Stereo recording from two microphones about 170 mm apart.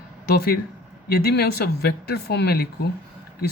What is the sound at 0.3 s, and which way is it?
Speech, 65° left (ahead or behind).